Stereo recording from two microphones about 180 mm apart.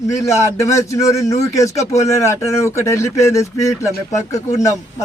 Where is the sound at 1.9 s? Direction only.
40° left (ahead or behind).